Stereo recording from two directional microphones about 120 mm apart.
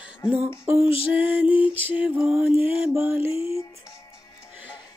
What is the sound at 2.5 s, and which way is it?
Music, 50° left (ahead or behind).